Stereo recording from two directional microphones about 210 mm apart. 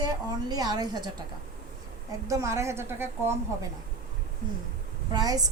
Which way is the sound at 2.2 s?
15° right (ahead or behind).